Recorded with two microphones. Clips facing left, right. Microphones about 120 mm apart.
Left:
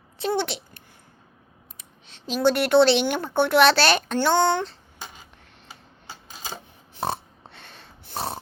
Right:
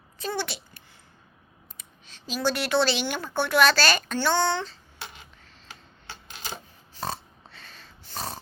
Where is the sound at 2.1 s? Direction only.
60° left (ahead or behind).